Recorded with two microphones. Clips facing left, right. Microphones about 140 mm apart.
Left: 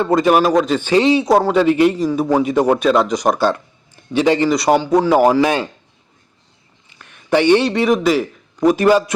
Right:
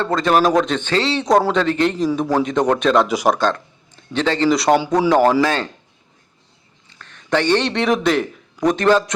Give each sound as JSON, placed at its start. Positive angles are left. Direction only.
{"t": 0.0, "sound": "a man's voice", "side_deg": 10}
{"t": 1.2, "sound": "a man's voice", "side_deg": 5}
{"t": 3.3, "sound": "speech", "side_deg": 10}
{"t": 4.4, "sound": "a man's voice", "side_deg": 0}
{"t": 6.9, "sound": "a man's voice", "side_deg": 10}